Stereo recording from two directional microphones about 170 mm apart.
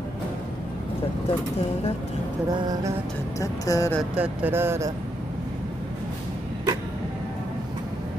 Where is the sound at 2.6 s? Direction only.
25° right (ahead or behind).